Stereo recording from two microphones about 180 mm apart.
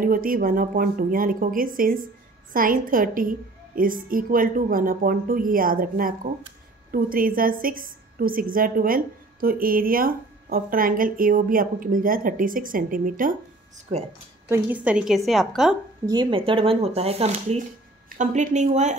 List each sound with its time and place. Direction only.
0.0 s a woman's voice: 50° right (ahead or behind)
14.5 s a woman's voice: 10° right (ahead or behind)
16.1 s speech: 25° right (ahead or behind)